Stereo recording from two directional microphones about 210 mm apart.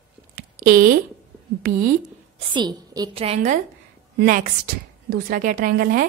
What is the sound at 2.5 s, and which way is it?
A woman's voice, 20° right (ahead or behind).